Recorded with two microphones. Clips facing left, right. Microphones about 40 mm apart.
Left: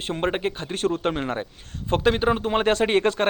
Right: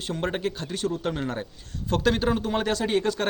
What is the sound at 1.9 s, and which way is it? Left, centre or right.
A man's voice, left.